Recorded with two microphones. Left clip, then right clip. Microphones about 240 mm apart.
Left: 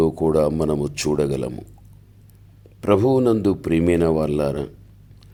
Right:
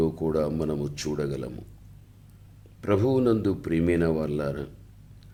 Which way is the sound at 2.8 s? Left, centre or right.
Left.